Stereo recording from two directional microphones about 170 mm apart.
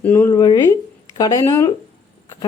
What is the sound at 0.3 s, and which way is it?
A woman's voice, 25° left (ahead or behind).